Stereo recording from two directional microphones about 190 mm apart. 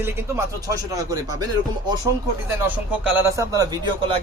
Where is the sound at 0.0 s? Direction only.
15° right (ahead or behind).